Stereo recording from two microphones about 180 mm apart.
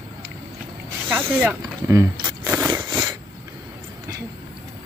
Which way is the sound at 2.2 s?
10° right (ahead or behind).